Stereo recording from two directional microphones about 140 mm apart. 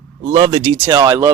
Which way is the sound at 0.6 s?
20° right (ahead or behind).